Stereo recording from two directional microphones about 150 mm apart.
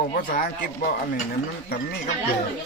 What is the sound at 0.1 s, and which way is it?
Speech, 65° left (ahead or behind).